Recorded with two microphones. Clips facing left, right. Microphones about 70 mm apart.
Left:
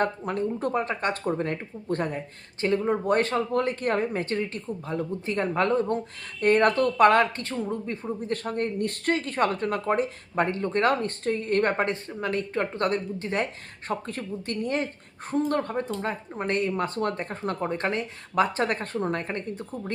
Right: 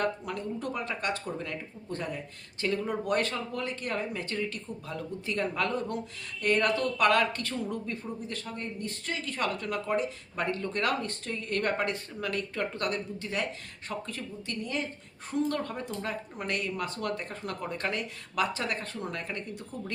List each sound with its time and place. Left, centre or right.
0.0 s speech: left
2.6 s speech: left
8.4 s speech: left